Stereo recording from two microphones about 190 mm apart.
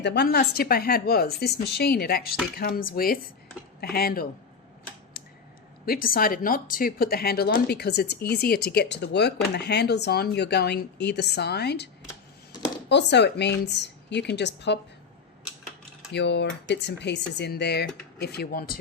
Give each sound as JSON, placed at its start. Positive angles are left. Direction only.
{"t": 0.0, "sound": "speech", "side_deg": 60}
{"t": 5.2, "sound": "tick-tock", "side_deg": 50}
{"t": 5.8, "sound": "speech", "side_deg": 50}
{"t": 12.9, "sound": "speech", "side_deg": 65}
{"t": 16.1, "sound": "speech", "side_deg": 65}